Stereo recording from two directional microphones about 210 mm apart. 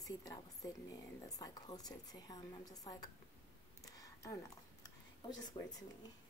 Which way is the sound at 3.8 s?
15° left (ahead or behind).